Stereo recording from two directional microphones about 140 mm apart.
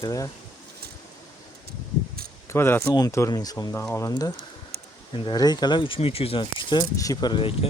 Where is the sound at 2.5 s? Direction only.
15° left (ahead or behind).